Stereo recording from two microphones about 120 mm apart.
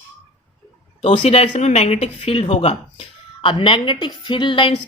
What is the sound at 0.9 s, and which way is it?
Speech, 65° left (ahead or behind).